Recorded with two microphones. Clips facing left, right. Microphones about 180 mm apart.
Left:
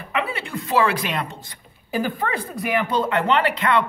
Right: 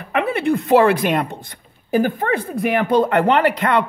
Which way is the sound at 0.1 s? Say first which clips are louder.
Right 8 dB; 55° right (ahead or behind).